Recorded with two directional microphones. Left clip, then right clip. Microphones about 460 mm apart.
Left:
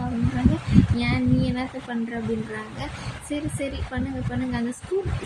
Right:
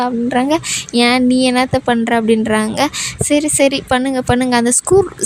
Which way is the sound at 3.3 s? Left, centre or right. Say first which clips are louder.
Right 17 dB; right.